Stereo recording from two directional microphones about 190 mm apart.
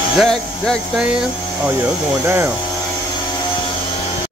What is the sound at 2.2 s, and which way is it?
Speech, 10° right (ahead or behind).